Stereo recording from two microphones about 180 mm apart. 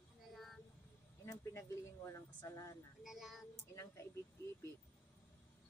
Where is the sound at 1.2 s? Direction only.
15° left (ahead or behind).